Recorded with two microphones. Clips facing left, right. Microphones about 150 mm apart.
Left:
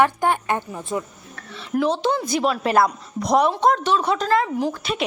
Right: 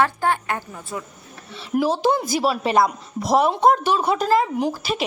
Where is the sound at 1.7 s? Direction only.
10° right (ahead or behind).